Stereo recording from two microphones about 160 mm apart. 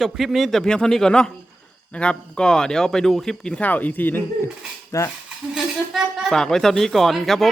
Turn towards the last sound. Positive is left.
turn(degrees=0)  # may be behind; listen again after turning